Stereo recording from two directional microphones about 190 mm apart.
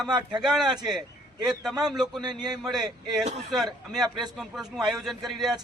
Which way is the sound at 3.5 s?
Centre (ahead or behind).